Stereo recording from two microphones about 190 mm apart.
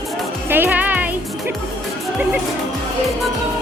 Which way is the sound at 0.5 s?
10° right (ahead or behind).